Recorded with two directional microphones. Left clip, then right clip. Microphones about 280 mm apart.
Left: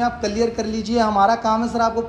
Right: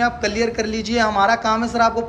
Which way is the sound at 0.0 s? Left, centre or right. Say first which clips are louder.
Right 1 dB; centre.